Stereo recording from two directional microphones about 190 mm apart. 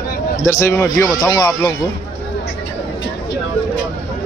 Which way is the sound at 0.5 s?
15° left (ahead or behind).